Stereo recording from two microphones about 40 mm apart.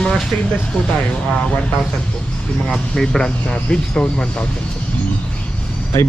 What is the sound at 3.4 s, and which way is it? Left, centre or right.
Speech, left.